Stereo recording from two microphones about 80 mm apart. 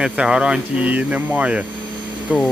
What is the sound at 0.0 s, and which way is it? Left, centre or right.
Speech, centre.